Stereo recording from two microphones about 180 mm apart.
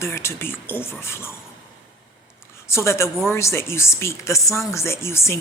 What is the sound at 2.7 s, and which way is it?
Speech, 15° left (ahead or behind).